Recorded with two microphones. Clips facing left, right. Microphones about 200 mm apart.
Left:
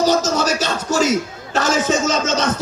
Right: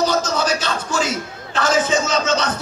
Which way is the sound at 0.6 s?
40° left (ahead or behind).